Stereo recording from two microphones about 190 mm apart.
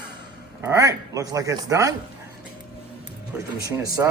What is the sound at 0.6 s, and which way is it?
Speech, 15° right (ahead or behind).